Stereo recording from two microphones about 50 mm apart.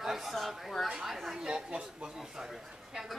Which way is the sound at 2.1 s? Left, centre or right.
Centre.